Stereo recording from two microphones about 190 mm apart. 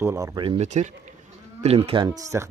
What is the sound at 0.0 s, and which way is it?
Speech, 15° right (ahead or behind).